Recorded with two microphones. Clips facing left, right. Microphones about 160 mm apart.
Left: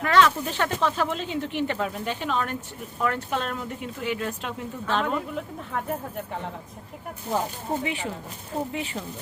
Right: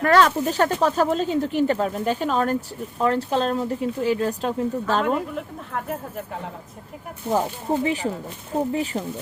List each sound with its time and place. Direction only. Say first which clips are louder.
0.0 s speech: right 3 dB; 45° right (ahead or behind)
5.7 s speech: right 1 dB; centre (ahead or behind)
7.9 s speech: right 6 dB; 35° right (ahead or behind)